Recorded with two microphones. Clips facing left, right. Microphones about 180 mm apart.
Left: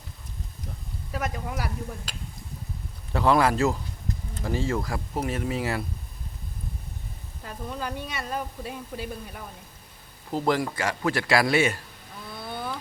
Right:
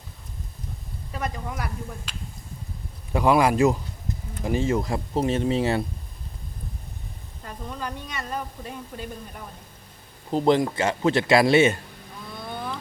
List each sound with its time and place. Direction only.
1.1 s speech: 5° left (ahead or behind)
2.1 s speech: 40° left (ahead or behind)
3.1 s a man's voice: 15° right (ahead or behind)
7.4 s speech: 5° left (ahead or behind)
10.3 s a man's voice: 20° right (ahead or behind)